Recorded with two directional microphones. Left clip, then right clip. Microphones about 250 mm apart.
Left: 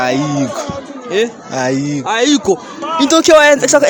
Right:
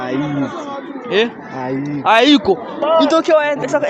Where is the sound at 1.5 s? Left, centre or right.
Left.